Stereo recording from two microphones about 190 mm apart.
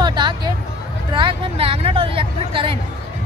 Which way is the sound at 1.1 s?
25° right (ahead or behind).